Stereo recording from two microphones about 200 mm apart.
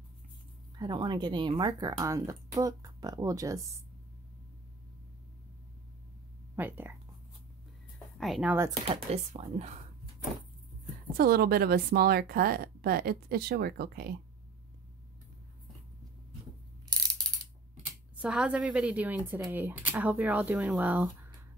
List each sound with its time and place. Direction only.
0.7 s speech: 20° right (ahead or behind)
6.5 s speech: 10° right (ahead or behind)
8.2 s speech: centre (ahead or behind)
8.8 s speech: 30° right (ahead or behind)
11.1 s a woman's voice: 50° right (ahead or behind)
18.1 s speech: 5° right (ahead or behind)